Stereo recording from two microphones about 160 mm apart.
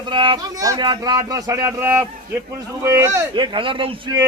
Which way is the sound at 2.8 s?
15° right (ahead or behind).